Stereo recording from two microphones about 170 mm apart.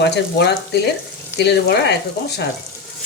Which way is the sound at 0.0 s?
80° left.